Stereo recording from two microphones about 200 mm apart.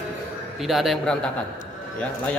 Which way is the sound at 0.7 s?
Centre (ahead or behind).